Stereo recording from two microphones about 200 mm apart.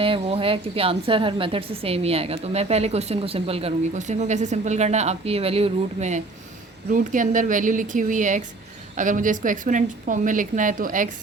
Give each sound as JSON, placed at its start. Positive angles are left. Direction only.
{"t": 0.0, "sound": "a woman's voice", "side_deg": -25}